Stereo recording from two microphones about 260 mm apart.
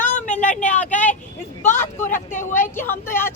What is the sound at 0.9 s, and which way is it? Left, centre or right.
Speech, centre.